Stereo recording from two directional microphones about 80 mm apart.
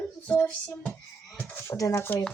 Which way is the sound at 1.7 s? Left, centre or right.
Left.